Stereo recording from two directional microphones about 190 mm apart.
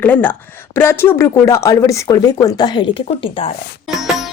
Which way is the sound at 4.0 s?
Centre (ahead or behind).